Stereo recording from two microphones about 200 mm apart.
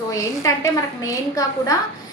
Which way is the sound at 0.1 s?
15° left (ahead or behind).